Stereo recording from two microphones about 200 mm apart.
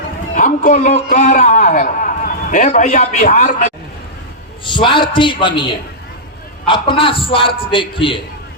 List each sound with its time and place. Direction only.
0.3 s a man's voice: 40° left (ahead or behind)
4.6 s a man's voice: 25° left (ahead or behind)